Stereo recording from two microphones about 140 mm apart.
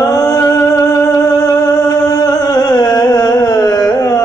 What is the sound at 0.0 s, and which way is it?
Music, 25° left (ahead or behind).